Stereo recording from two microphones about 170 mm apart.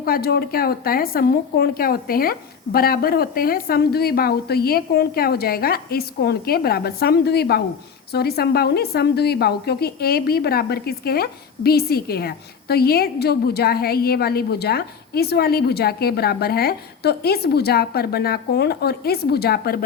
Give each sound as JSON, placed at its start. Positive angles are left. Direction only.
{"t": 0.0, "sound": "a woman's voice", "side_deg": 65}